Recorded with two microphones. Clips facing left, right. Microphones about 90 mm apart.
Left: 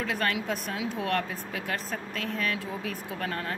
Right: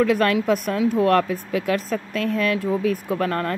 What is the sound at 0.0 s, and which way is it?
Speech, 55° right (ahead or behind).